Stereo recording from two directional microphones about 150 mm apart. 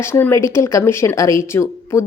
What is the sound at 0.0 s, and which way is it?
Speech, 15° left (ahead or behind).